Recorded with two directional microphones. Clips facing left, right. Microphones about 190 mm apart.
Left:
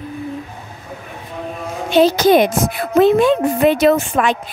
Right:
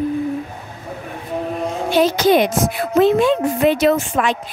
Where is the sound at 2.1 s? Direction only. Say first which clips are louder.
Left 2 dB; 45° left (ahead or behind).